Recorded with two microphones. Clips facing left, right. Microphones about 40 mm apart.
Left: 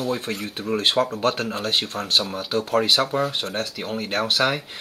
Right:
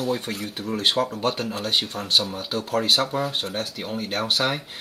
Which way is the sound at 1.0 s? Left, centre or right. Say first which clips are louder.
Left 4 dB; left.